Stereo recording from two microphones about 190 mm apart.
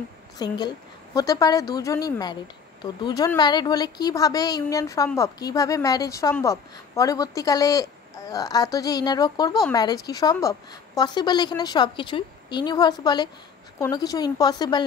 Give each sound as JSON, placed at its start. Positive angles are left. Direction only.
{"t": 0.4, "sound": "a woman's voice", "side_deg": 20}